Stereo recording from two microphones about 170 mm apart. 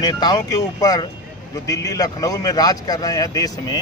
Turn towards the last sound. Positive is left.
turn(degrees=20)  # may be behind; listen again after turning